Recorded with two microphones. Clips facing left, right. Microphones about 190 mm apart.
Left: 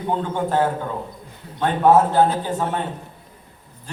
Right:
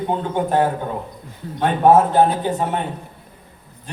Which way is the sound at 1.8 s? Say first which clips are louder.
Right 2 dB; 20° right (ahead or behind).